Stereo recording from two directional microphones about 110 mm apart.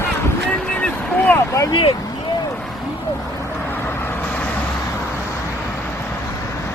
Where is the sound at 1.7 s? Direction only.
55° left (ahead or behind).